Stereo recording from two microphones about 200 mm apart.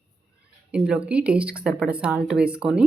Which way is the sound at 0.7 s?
5° right (ahead or behind).